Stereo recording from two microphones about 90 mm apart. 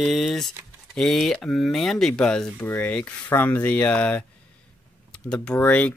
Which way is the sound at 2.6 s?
20° left (ahead or behind).